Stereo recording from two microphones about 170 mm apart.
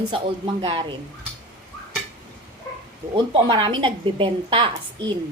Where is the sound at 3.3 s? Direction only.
30° right (ahead or behind).